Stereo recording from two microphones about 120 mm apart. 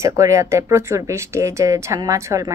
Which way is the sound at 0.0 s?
25° right (ahead or behind).